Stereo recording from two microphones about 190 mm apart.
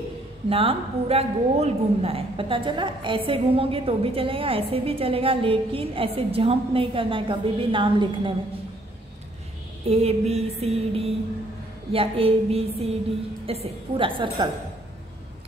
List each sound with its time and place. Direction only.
0.5 s a woman's voice: 30° right (ahead or behind)
9.8 s music: 30° right (ahead or behind)
13.5 s a woman's voice: 30° right (ahead or behind)